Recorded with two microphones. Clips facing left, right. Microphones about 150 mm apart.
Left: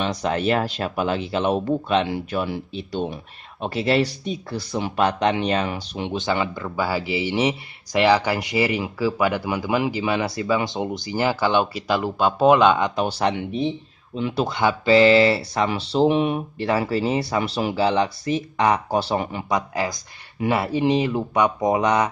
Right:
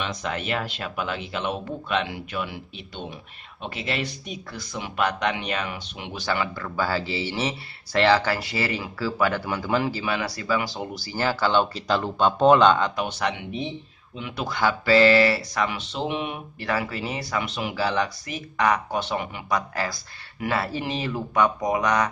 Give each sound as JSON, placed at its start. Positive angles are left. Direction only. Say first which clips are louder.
{"t": 0.0, "sound": "speech", "louder": "left 7 dB", "side_deg": 35}
{"t": 12.9, "sound": "speech", "louder": "left 5 dB", "side_deg": 30}
{"t": 19.5, "sound": "speech", "louder": "left 2 dB", "side_deg": 20}